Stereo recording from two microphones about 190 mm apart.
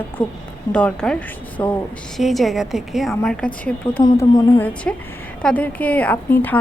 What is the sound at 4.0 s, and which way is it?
Music, 20° left (ahead or behind).